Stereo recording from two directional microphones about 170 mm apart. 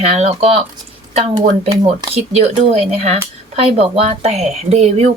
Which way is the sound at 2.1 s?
35° right (ahead or behind).